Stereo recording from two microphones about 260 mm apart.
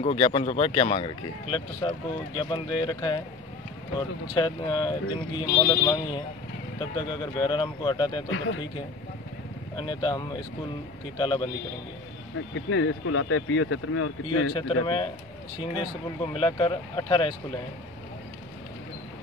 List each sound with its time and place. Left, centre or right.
0.0 s speech: left
4.4 s speech: centre
8.3 s speech: left
9.8 s speech: centre
12.5 s speech: left
14.5 s speech: centre
16.3 s speech: centre